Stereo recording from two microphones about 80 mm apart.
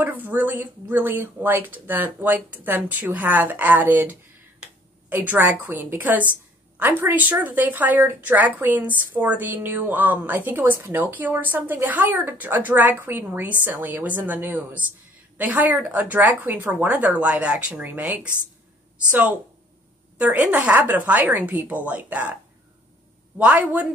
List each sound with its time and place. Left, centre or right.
0.0 s a woman's voice: right
20.2 s a woman's voice: centre
23.3 s a woman's voice: centre